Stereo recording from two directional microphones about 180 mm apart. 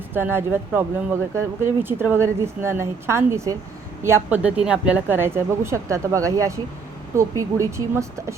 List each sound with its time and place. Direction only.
0.1 s speech: 10° right (ahead or behind)